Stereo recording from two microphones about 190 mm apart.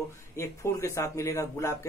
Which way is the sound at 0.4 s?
15° left (ahead or behind).